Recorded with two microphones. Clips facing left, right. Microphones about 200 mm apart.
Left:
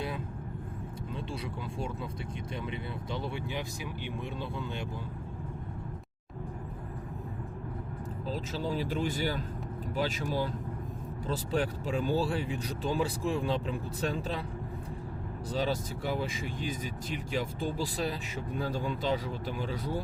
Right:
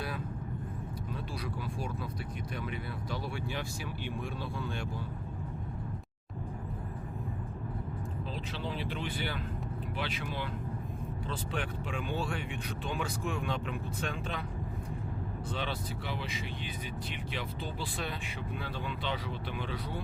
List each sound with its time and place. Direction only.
2.6 s speech: 25° left (ahead or behind)
8.3 s speech: 40° left (ahead or behind)
15.5 s speech: 40° left (ahead or behind)